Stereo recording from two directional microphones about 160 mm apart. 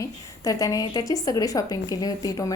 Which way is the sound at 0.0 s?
20° left (ahead or behind).